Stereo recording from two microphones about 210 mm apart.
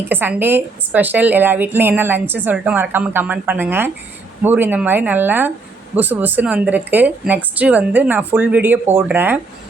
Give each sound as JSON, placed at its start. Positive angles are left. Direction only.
{"t": 0.0, "sound": "a woman's voice", "side_deg": -10}